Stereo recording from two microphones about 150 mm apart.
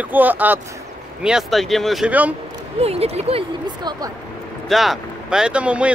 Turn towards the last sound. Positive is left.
turn(degrees=-10)  # may be behind; listen again after turning